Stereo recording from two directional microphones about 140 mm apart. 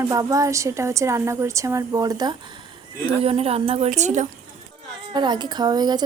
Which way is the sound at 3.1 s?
45° right (ahead or behind).